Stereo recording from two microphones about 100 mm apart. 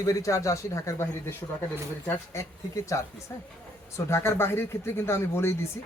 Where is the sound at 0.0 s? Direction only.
35° left (ahead or behind).